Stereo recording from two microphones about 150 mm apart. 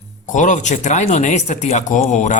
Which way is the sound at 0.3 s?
55° left (ahead or behind).